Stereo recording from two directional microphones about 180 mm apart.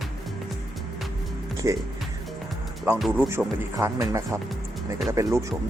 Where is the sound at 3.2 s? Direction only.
15° right (ahead or behind).